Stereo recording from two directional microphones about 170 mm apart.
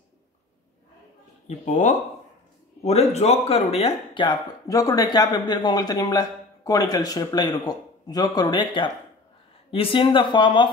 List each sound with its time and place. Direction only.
1.7 s speech: 45° left (ahead or behind); by 10.7 s 30° left (ahead or behind)